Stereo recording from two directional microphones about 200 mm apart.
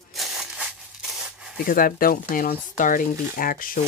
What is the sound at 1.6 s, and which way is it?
Speech, 45° left (ahead or behind).